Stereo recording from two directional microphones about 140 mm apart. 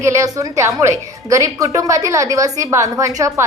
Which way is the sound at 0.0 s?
20° right (ahead or behind).